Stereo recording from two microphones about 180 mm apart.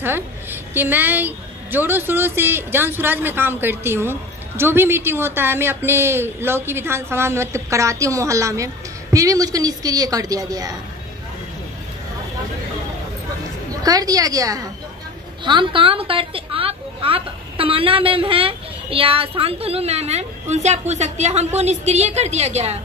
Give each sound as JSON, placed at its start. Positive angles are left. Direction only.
{"t": 0.0, "sound": "a woman's voice", "side_deg": -10}
{"t": 13.8, "sound": "a woman's voice", "side_deg": -20}